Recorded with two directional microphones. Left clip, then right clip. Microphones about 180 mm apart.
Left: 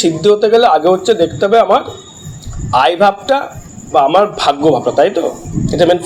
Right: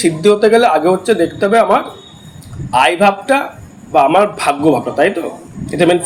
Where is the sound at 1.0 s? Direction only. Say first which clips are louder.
Left 2 dB; 30° right (ahead or behind).